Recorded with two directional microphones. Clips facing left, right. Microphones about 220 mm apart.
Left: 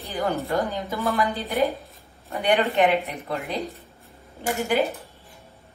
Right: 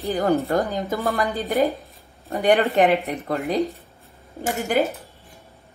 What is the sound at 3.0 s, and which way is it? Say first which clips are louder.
Speech: right 3 dB; centre (ahead or behind).